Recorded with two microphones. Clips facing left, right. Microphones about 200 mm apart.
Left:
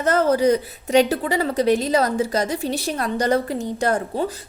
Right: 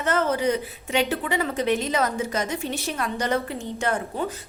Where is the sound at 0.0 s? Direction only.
40° left (ahead or behind).